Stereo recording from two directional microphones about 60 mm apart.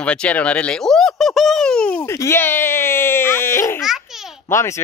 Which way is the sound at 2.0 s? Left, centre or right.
Left.